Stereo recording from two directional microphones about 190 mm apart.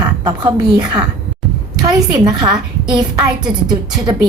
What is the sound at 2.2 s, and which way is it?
A woman's voice, 25° right (ahead or behind).